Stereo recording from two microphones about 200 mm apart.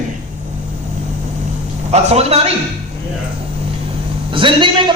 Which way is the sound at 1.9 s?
30° right (ahead or behind).